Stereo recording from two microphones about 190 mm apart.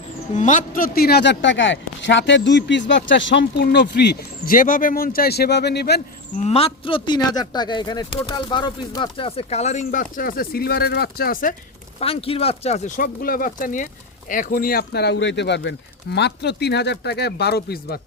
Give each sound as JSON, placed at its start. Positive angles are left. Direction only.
{"t": 0.3, "sound": "speech", "side_deg": 40}
{"t": 6.4, "sound": "a man's voice", "side_deg": 30}
{"t": 11.9, "sound": "speech", "side_deg": 30}